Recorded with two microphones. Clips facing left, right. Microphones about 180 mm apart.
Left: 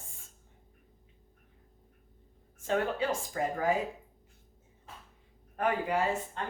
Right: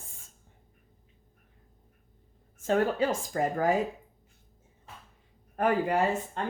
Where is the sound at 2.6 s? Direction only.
40° right (ahead or behind).